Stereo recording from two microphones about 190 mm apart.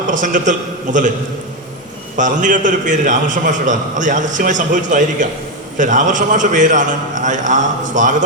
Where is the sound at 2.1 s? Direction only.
40° right (ahead or behind).